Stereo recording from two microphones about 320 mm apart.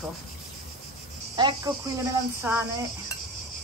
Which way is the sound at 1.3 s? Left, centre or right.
Centre.